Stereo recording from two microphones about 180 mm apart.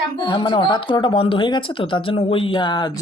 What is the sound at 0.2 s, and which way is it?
Speech, 25° left (ahead or behind).